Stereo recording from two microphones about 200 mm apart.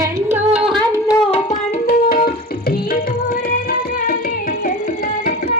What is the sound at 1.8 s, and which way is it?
Tabla, 50° left (ahead or behind).